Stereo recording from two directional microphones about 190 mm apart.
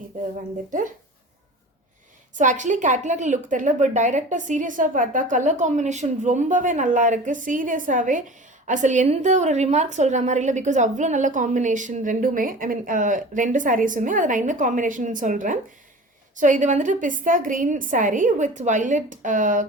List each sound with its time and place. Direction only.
2.3 s a woman's voice: 40° right (ahead or behind)